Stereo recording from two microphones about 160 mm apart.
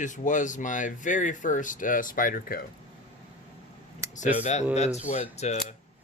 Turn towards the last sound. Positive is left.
turn(degrees=45)  # may be behind; listen again after turning